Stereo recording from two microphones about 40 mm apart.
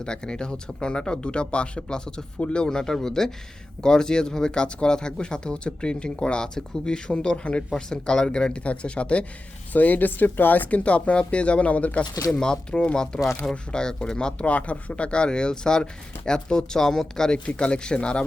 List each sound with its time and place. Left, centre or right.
0.0 s speech: left
7.7 s speech: centre
9.7 s speech: left
10.7 s speech: left
12.4 s speech: centre
14.4 s speech: left; by 17.3 s centre
17.3 s speech: left